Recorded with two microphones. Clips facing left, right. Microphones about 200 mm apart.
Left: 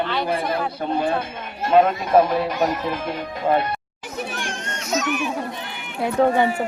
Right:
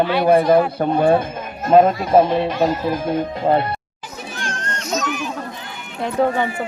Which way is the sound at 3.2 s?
30° right (ahead or behind).